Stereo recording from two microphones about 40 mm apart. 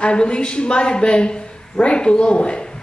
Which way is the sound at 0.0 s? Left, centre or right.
Left.